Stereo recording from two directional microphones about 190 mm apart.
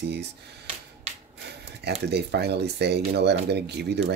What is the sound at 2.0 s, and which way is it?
Speech, 60° right (ahead or behind).